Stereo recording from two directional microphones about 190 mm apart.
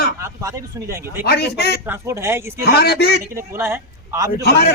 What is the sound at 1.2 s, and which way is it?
Speech, 60° left (ahead or behind).